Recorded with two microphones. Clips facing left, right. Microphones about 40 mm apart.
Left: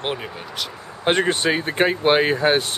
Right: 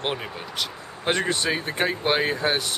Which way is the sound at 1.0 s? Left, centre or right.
Left.